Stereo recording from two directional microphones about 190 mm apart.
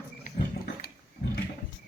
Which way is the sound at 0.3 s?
50° left (ahead or behind).